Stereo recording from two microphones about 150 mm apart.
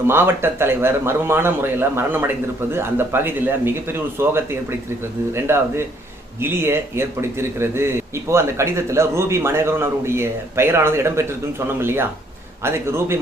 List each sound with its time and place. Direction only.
0.1 s a man's voice: 15° right (ahead or behind)